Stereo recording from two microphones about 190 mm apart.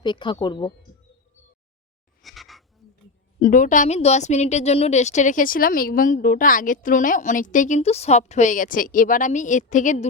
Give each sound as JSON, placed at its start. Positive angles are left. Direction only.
{"t": 0.0, "sound": "speech", "side_deg": 25}
{"t": 2.2, "sound": "a sound", "side_deg": 0}
{"t": 3.4, "sound": "a woman's voice", "side_deg": 45}